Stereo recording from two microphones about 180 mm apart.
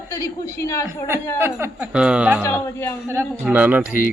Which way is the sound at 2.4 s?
15° left (ahead or behind).